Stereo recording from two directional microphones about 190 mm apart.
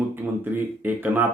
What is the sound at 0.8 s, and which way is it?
Speech, 10° right (ahead or behind).